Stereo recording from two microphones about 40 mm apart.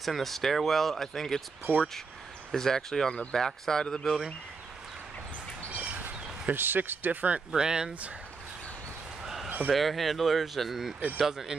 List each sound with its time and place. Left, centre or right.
0.0 s speech: centre
1.7 s speech: right
2.5 s speech: centre
5.8 s a sound: right
7.5 s speech: centre
9.2 s a sound: centre
9.7 s speech: centre